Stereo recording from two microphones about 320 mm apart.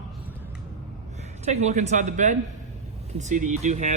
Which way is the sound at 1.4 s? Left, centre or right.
Right.